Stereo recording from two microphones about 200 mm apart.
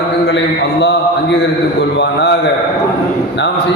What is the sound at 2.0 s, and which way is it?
Speech, 60° left (ahead or behind).